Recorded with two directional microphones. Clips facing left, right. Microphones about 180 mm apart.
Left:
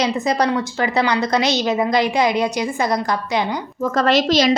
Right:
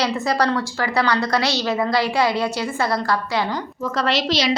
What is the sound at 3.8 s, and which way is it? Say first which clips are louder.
Speech: left 5 dB; 45° left (ahead or behind).